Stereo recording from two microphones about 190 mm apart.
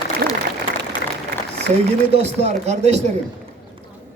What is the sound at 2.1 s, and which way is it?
A man's voice, 35° right (ahead or behind).